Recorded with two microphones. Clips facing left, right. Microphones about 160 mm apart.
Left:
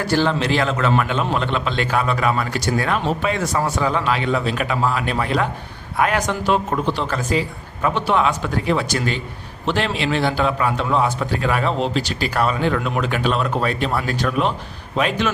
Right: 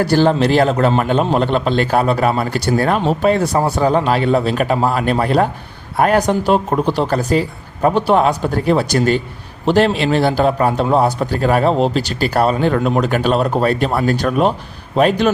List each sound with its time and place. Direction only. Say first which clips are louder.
0.0 s a man's voice: right 6 dB; 40° right (ahead or behind)